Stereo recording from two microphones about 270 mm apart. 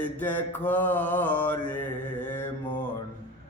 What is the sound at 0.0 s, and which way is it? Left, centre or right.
Mantra, centre.